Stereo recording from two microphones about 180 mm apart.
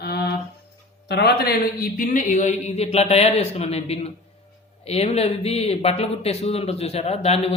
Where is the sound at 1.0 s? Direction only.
65° left (ahead or behind).